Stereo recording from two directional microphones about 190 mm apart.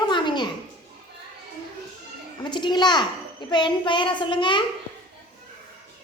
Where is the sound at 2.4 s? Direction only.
25° left (ahead or behind).